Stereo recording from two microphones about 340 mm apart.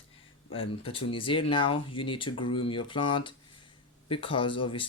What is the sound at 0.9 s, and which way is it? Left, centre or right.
Speech, centre.